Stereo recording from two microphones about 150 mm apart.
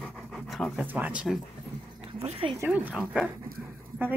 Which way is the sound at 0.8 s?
10° right (ahead or behind).